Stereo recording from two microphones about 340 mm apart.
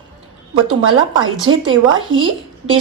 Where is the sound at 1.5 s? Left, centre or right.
Right.